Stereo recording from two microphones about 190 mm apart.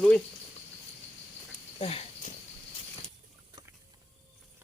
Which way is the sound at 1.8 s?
30° left (ahead or behind).